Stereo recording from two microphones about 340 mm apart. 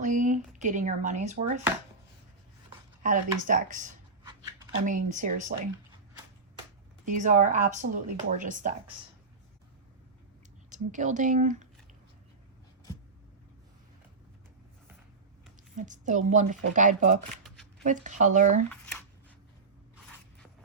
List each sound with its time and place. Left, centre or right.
0.0 s speech: right
3.0 s speech: right
7.0 s speech: right
10.7 s speech: right
15.7 s speech: right